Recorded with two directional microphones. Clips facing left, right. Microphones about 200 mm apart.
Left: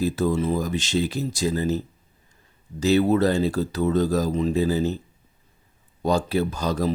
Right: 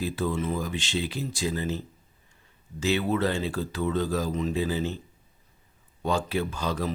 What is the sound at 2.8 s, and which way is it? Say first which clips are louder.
Speech: left 7 dB; 40° left (ahead or behind).